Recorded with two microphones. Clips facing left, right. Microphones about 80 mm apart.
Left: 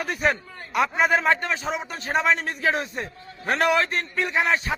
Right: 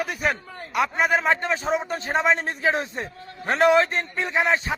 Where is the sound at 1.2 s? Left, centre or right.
Right.